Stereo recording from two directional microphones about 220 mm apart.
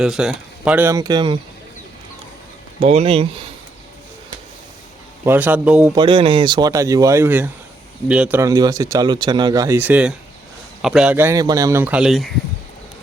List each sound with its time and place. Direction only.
0.0 s speech: centre (ahead or behind); by 1.4 s 20° right (ahead or behind)
2.8 s speech: 25° right (ahead or behind)
5.2 s speech: 10° right (ahead or behind)
5.9 s speech: 20° right (ahead or behind); by 12.3 s centre (ahead or behind)